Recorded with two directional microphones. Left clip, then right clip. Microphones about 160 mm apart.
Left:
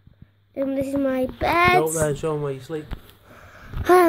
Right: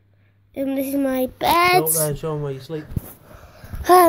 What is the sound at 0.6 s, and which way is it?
A child's voice, 20° right (ahead or behind).